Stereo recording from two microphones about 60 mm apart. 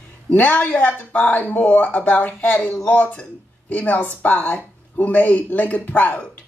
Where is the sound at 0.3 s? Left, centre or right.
Left.